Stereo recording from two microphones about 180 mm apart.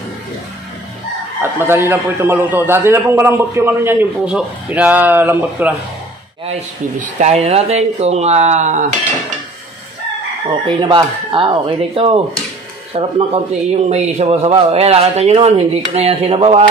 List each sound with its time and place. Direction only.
1.4 s a man's voice: 10° right (ahead or behind)
6.4 s speech: 40° right (ahead or behind)
10.8 s speech: 25° right (ahead or behind)